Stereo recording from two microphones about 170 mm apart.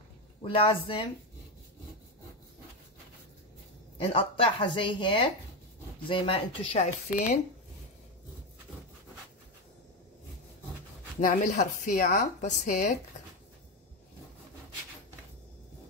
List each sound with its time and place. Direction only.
0.4 s speech: 30° left (ahead or behind)
4.0 s speech: 35° left (ahead or behind)
7.1 s speech: 50° left (ahead or behind)
11.1 s speech: 50° left (ahead or behind)